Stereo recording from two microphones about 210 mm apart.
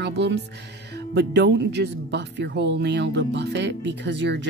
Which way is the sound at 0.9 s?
55° right (ahead or behind).